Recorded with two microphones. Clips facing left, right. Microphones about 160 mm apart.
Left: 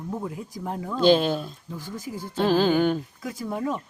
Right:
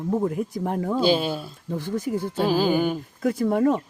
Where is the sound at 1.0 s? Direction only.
10° right (ahead or behind).